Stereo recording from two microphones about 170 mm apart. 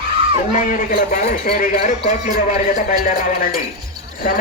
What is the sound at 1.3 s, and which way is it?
A man's voice, 50° left (ahead or behind).